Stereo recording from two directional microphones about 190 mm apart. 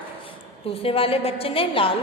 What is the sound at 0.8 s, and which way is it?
A woman's voice, 30° left (ahead or behind).